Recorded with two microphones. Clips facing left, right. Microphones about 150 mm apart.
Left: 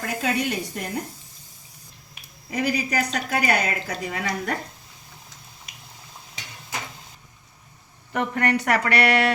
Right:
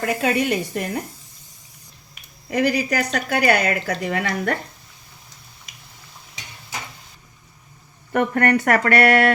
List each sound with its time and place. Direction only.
0.0 s a woman's voice: 70° right (ahead or behind)
2.5 s a woman's voice: 70° right (ahead or behind)
8.1 s speech: 55° right (ahead or behind)